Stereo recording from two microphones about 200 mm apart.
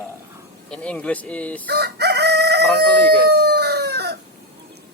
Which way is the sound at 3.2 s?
55° right (ahead or behind).